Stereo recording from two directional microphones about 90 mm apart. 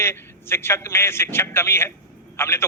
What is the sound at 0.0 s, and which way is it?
A man's voice, 30° left (ahead or behind).